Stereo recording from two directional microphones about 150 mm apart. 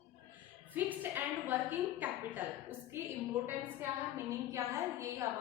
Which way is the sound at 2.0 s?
15° right (ahead or behind).